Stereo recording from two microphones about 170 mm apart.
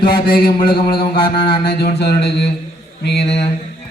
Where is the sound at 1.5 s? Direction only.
60° left (ahead or behind); by 2.5 s 85° left.